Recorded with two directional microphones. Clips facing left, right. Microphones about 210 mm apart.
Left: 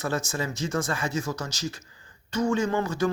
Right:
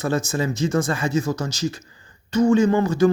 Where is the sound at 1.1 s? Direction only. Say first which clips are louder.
Right 7 dB; 35° right (ahead or behind).